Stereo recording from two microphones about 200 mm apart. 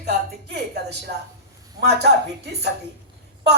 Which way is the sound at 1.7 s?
55° right (ahead or behind).